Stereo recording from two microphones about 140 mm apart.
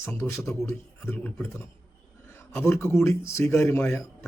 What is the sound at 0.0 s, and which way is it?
Speech, 20° left (ahead or behind).